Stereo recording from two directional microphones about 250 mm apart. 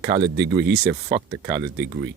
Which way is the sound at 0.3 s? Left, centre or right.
Right.